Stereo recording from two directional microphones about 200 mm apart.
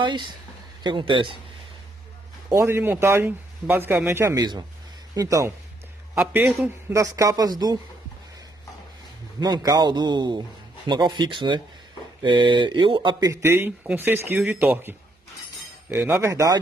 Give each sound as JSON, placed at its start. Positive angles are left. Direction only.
{"t": 0.0, "sound": "a man's voice", "side_deg": -25}
{"t": 2.5, "sound": "speech", "side_deg": -15}
{"t": 9.4, "sound": "a man's voice", "side_deg": -20}